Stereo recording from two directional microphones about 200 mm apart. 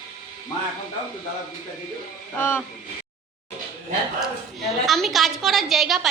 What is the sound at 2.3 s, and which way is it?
Speech, 10° left (ahead or behind).